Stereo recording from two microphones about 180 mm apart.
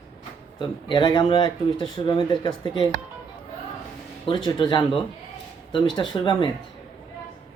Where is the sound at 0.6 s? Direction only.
25° left (ahead or behind).